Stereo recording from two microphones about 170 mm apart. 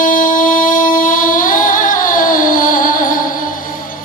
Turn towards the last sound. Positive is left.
turn(degrees=55)  # may be behind; listen again after turning